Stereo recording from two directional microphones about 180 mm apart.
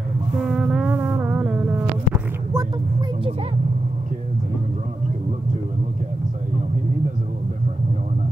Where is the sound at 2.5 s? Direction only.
15° right (ahead or behind).